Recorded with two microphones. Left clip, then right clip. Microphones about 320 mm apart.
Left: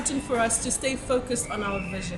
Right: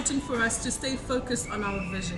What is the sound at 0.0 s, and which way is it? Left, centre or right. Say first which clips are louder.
A woman's voice: left 2 dB; centre.